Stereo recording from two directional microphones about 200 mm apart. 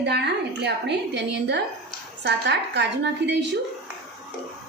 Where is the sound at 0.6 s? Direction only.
60° right (ahead or behind).